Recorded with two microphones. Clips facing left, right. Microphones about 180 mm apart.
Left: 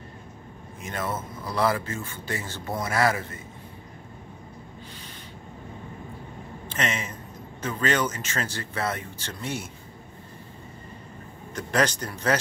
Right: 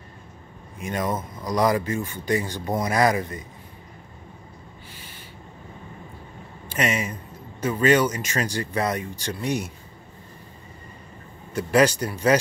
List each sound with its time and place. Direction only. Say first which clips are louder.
0.8 s speech: right 4 dB; 15° right (ahead or behind)
6.7 s speech: right 5 dB; 10° right (ahead or behind)
11.5 s speech: right 6 dB; 10° right (ahead or behind)